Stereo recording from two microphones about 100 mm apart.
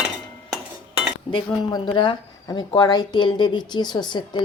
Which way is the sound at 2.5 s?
40° left (ahead or behind).